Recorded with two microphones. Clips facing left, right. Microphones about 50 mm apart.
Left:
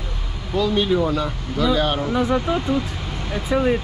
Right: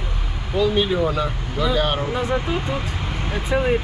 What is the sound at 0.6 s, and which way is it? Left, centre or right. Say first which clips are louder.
Speech: even; centre.